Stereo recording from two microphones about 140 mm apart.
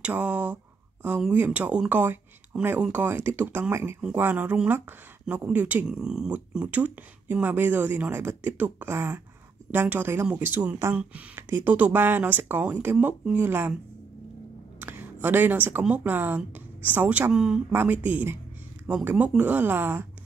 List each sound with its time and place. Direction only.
0.0 s speech: 10° right (ahead or behind)
14.8 s speech: 15° right (ahead or behind)